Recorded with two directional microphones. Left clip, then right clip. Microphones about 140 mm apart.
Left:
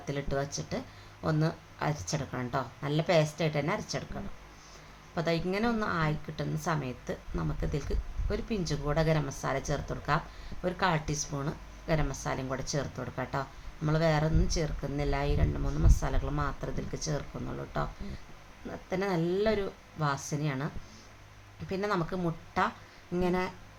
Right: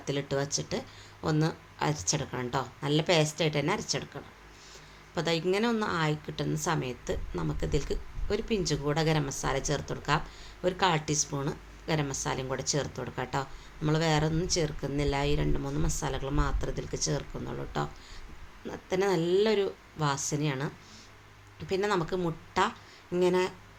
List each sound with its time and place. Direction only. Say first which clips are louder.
0.0 s a woman's voice: right 2 dB; 15° right (ahead or behind)
5.1 s a woman's voice: right 3 dB; 15° right (ahead or behind)
21.7 s a woman's voice: right 3 dB; 15° right (ahead or behind)